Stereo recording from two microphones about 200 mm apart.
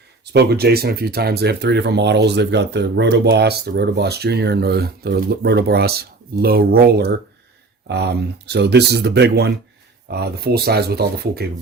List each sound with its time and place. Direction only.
0.3 s speech: 50° right (ahead or behind)